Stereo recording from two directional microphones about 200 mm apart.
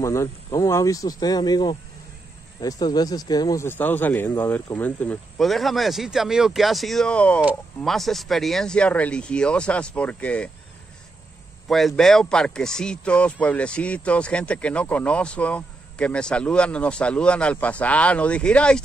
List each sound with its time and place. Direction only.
0.0 s speech: 15° left (ahead or behind)
11.6 s speech: centre (ahead or behind)